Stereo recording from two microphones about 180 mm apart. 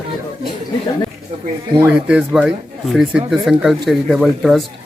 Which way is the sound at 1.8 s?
5° right (ahead or behind).